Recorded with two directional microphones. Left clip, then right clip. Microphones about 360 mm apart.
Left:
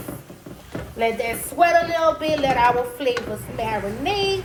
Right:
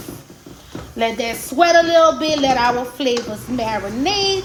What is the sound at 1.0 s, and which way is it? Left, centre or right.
Speech, right.